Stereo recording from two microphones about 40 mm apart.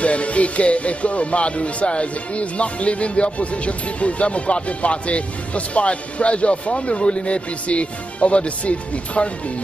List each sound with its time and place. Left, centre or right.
0.0 s speech: left